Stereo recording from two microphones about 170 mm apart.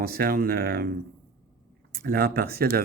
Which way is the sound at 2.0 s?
60° right (ahead or behind).